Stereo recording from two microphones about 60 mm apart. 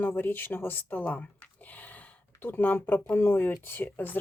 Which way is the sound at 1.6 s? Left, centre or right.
Left.